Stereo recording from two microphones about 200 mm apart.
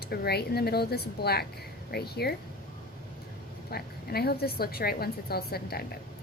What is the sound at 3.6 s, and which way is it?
A woman's voice, 50° left (ahead or behind).